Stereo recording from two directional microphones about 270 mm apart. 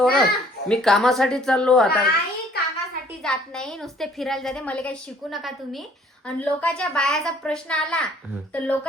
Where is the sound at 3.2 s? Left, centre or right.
Centre.